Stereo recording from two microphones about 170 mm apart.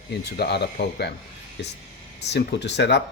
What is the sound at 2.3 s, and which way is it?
Speech, 90° left.